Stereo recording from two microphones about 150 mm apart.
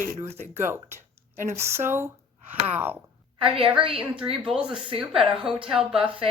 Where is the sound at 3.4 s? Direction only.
35° right (ahead or behind).